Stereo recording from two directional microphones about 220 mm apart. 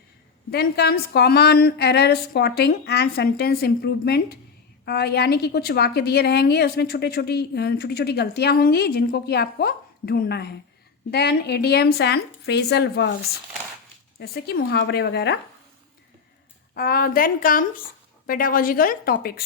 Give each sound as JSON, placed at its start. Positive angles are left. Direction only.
{"t": 0.5, "sound": "a woman's voice", "side_deg": 45}
{"t": 14.2, "sound": "a woman's voice", "side_deg": 45}
{"t": 16.7, "sound": "a woman's voice", "side_deg": 40}